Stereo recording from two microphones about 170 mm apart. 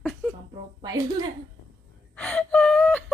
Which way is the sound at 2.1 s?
5° left (ahead or behind).